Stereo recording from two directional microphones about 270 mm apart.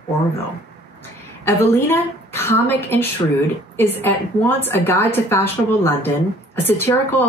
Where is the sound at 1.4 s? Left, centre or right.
Centre.